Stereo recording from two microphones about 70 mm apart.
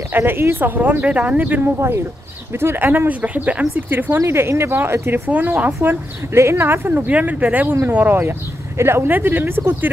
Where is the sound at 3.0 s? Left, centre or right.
Right.